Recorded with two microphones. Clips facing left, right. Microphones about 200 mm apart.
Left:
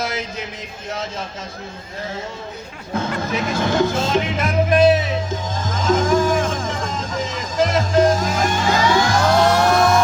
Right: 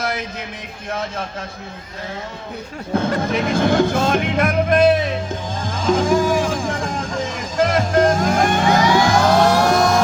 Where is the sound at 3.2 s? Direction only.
55° right (ahead or behind).